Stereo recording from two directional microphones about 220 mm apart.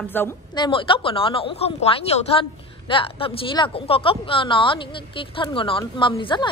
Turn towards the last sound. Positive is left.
turn(degrees=20)  # may be behind; listen again after turning